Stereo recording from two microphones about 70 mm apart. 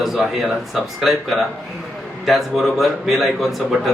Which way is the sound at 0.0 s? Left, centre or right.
Centre.